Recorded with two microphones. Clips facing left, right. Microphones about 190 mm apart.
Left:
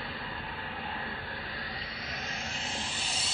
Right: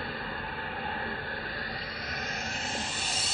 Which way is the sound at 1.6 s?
45° right (ahead or behind).